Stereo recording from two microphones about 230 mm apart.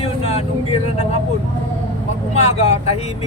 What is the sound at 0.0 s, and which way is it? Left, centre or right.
Vehicle, left.